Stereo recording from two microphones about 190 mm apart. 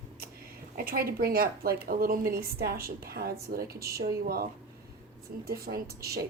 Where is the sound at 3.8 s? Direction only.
15° right (ahead or behind).